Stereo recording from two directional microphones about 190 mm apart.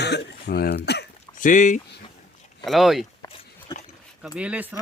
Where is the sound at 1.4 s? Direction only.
40° left (ahead or behind).